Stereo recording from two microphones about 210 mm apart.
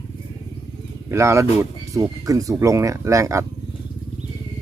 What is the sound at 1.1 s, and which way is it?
Speech, 15° right (ahead or behind).